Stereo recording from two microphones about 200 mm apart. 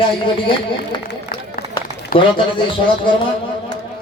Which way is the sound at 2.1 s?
45° left (ahead or behind).